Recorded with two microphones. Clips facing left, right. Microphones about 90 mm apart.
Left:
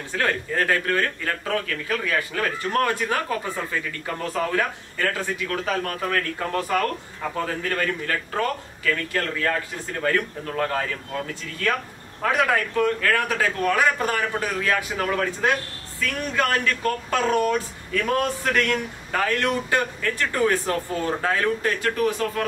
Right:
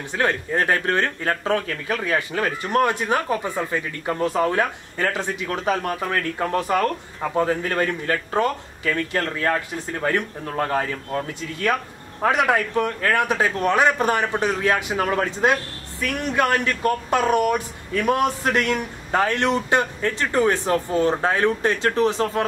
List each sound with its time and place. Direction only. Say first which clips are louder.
0.1 s speech: right 2 dB; 20° right (ahead or behind)